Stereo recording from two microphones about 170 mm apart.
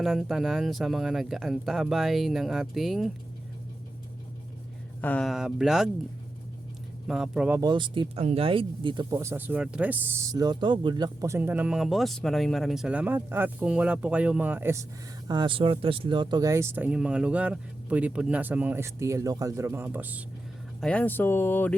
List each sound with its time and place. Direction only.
0.0 s speech: centre (ahead or behind)
4.9 s speech: 10° left (ahead or behind)
7.1 s speech: 5° right (ahead or behind)
7.6 s speech: 30° right (ahead or behind)
9.1 s speech: 15° right (ahead or behind)
15.3 s speech: 30° right (ahead or behind); by 20.2 s 10° right (ahead or behind)
20.8 s speech: 10° left (ahead or behind)